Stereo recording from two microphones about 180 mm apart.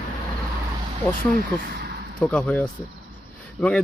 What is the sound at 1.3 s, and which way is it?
Speech, 65° right (ahead or behind).